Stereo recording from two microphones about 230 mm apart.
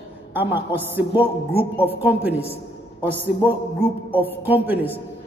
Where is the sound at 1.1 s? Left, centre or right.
Left.